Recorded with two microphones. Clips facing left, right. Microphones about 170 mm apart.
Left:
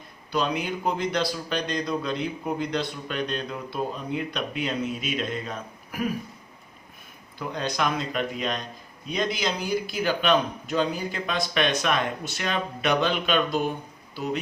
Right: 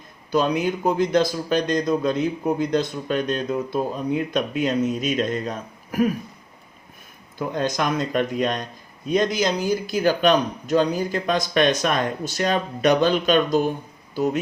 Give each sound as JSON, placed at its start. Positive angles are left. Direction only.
{"t": 0.3, "sound": "speech", "side_deg": -45}
{"t": 7.3, "sound": "speech", "side_deg": -45}